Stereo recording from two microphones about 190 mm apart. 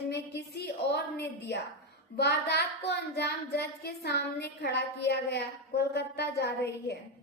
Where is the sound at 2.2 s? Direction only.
60° left (ahead or behind).